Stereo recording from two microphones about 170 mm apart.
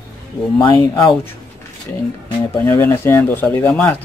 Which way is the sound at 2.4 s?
15° left (ahead or behind).